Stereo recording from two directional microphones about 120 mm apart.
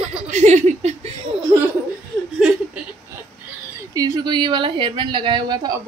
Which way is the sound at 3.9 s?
30° right (ahead or behind).